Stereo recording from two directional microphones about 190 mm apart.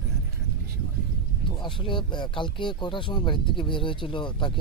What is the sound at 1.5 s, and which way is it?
Speech, 25° left (ahead or behind).